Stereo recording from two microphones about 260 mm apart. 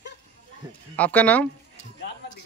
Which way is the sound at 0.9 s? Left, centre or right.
Centre.